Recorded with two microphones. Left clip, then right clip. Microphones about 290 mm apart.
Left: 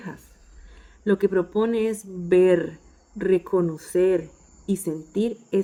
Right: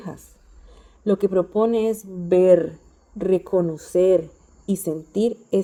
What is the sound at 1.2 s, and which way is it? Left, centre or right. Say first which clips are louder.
A woman's voice: right 4 dB; centre.